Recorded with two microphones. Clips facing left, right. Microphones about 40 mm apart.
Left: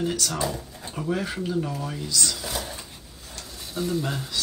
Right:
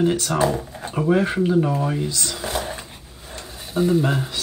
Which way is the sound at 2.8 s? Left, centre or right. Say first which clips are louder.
Right 4 dB; right.